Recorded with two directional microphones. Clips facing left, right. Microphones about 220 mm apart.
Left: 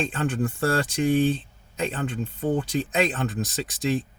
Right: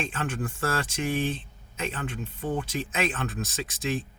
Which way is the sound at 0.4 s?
40° left (ahead or behind).